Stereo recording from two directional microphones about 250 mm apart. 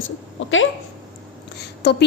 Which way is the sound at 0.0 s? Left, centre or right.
Left.